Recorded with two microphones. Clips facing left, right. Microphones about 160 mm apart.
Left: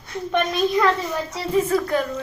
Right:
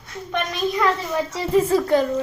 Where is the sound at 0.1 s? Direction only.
Centre (ahead or behind).